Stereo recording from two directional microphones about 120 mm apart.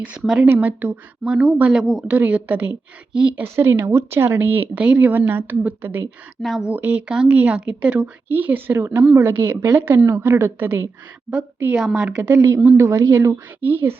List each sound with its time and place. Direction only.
0.0 s speech: 10° right (ahead or behind)
3.4 s speech: 20° right (ahead or behind)
6.4 s speech: 5° right (ahead or behind)
12.3 s a woman's voice: 25° right (ahead or behind)